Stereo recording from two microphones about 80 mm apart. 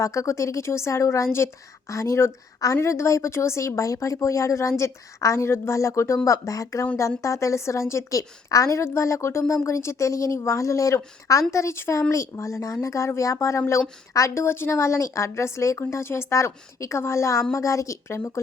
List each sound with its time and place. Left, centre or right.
0.0 s a woman's voice: left